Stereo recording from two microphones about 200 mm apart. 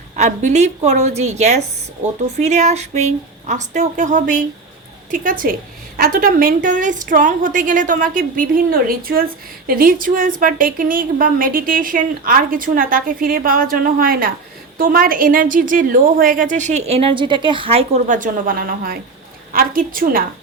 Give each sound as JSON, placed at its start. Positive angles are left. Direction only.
{"t": 0.2, "sound": "a woman's voice", "side_deg": -35}